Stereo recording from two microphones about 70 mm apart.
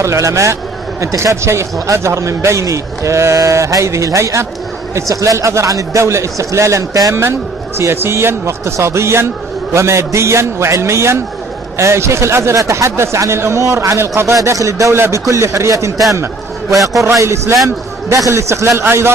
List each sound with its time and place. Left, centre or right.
0.0 s a man's voice: right
16.7 s a man's voice: centre
17.0 s a man's voice: right